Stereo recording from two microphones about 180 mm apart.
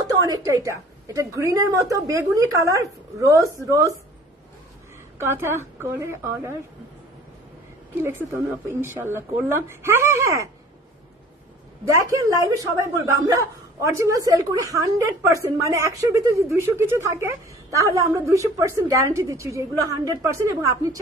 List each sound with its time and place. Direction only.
0.5 s a woman's voice: 15° right (ahead or behind)
5.2 s a woman's voice: 15° right (ahead or behind)
8.6 s a woman's voice: 15° right (ahead or behind)
11.8 s a woman's voice: 15° right (ahead or behind)